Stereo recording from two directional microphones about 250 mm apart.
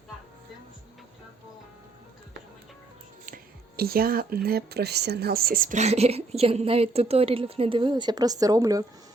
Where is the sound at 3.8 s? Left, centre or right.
Right; by 8.8 s centre.